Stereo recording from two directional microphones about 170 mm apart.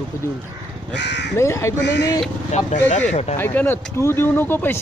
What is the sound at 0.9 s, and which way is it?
Speech, 90° left.